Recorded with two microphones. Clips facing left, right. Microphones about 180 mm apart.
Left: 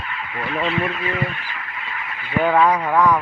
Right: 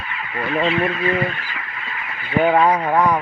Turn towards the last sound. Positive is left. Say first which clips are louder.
# even
turn(degrees=-30)  # may be behind; listen again after turning